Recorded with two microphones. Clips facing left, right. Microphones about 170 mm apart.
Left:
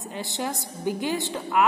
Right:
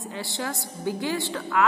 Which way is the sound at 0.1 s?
20° left (ahead or behind).